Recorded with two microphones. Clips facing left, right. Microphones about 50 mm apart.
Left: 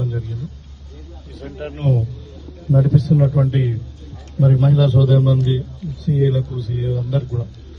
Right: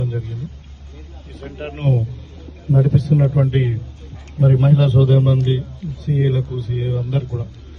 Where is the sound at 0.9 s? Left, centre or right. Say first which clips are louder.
Left 1 dB; right.